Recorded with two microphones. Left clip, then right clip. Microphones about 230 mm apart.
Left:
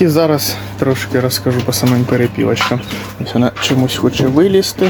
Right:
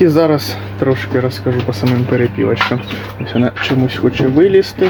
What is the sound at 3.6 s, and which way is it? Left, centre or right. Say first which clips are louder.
Speech: left 1 dB; centre.